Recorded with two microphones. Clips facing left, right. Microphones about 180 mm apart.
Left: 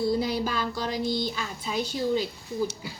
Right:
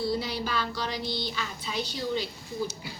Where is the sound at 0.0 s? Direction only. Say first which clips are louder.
Left 4 dB; 50° left (ahead or behind).